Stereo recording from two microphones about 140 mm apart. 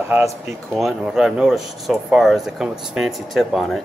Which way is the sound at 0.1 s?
20° right (ahead or behind).